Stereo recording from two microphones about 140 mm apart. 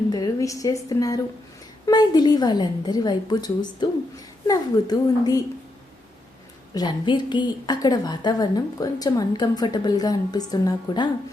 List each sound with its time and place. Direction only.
0.1 s a woman's voice: 25° left (ahead or behind)
6.7 s a woman's voice: 35° left (ahead or behind)